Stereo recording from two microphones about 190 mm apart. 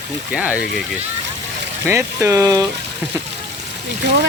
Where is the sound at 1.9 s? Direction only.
15° right (ahead or behind).